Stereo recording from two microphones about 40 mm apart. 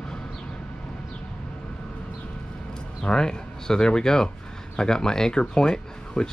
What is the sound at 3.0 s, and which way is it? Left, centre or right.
Speech, centre.